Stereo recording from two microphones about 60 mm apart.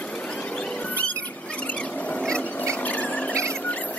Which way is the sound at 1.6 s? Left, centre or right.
Centre.